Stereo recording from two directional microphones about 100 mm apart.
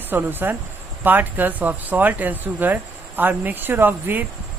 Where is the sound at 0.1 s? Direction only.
20° right (ahead or behind).